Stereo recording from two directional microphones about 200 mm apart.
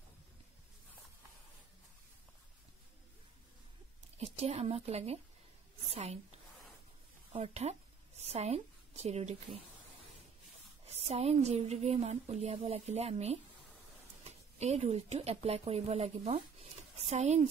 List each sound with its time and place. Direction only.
4.2 s a woman's voice: 30° right (ahead or behind)
7.3 s a woman's voice: 30° right (ahead or behind)
10.9 s a woman's voice: 30° right (ahead or behind)
14.6 s a woman's voice: 35° right (ahead or behind)